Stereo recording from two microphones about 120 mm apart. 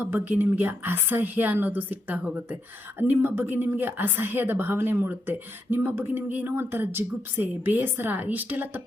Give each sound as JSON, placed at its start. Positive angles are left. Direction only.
{"t": 0.0, "sound": "a woman's voice", "side_deg": -15}